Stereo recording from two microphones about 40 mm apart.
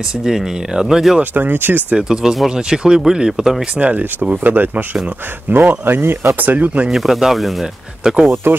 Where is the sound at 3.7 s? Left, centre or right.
Right.